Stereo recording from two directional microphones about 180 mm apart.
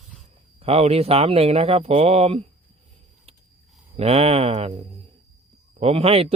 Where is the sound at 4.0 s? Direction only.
35° right (ahead or behind).